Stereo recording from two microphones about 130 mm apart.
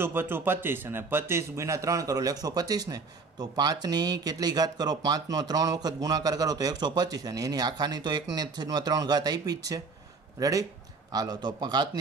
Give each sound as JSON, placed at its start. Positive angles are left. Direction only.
{"t": 0.0, "sound": "a man's voice", "side_deg": -15}